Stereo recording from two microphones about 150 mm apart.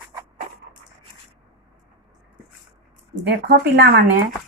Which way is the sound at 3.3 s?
90° right.